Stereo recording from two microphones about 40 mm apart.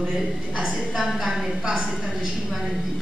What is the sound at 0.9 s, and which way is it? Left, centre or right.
Speech, centre.